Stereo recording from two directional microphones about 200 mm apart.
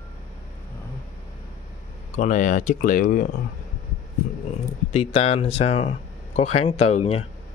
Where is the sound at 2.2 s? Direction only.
40° left (ahead or behind).